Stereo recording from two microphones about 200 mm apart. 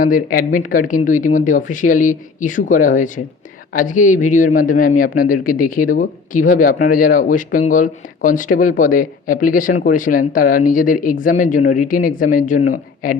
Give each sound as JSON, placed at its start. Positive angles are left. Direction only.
{"t": 0.0, "sound": "a man's voice", "side_deg": 45}